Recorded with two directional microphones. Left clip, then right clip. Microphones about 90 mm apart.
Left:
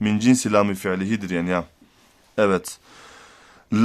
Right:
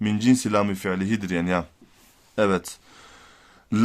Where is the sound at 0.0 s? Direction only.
35° left (ahead or behind); by 1.6 s 5° left (ahead or behind).